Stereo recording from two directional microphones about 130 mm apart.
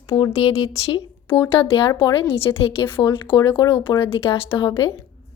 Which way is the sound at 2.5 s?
30° left (ahead or behind).